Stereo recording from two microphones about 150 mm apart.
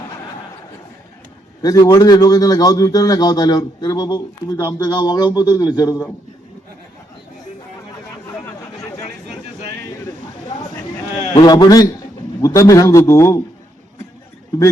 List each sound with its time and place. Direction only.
1.6 s a man's voice: 25° left (ahead or behind)
11.3 s a man's voice: 30° left (ahead or behind)